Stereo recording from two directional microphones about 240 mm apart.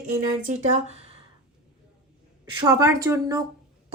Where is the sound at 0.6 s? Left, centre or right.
Right.